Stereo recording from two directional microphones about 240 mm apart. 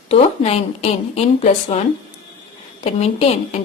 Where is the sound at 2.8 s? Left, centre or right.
Left.